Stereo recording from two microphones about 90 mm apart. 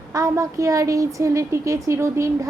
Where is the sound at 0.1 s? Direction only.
40° right (ahead or behind).